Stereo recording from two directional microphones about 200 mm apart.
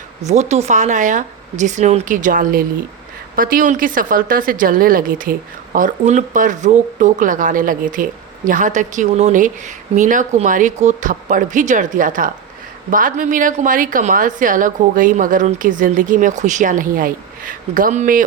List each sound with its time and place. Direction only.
0.2 s a woman's voice: 35° right (ahead or behind)